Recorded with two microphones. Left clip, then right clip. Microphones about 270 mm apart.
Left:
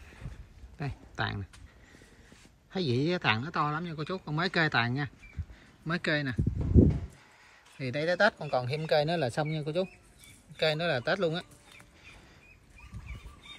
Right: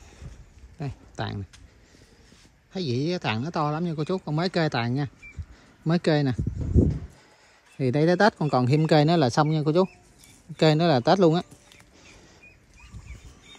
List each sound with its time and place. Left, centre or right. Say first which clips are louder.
0.7 s speech: right 1 dB; centre
2.7 s speech: right 2 dB; centre
6.7 s a sound: even; left
7.8 s speech: right 6 dB; centre